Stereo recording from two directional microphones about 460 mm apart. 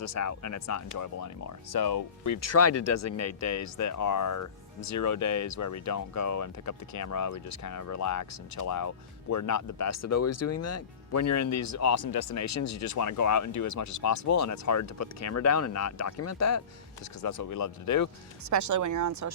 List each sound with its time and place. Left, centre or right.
0.0 s speech: left
18.4 s speech: right